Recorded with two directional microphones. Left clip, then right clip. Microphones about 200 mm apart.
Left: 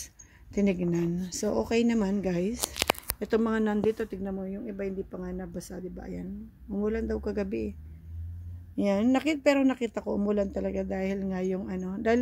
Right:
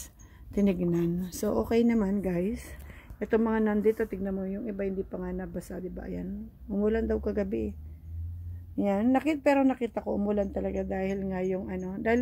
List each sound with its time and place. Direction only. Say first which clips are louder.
0.5 s a woman's voice: even; 5° left (ahead or behind)
2.1 s speech: left 1 dB; 20° left (ahead or behind)
3.9 s a woman's voice: right 2 dB; centre (ahead or behind)
8.7 s speech: even; 20° left (ahead or behind)